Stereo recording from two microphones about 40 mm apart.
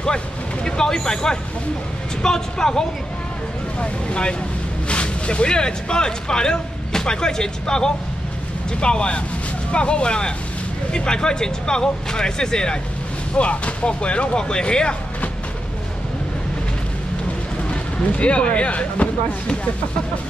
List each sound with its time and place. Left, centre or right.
0.7 s speech: centre
3.8 s speech: left
13.4 s speech: left
17.6 s speech: left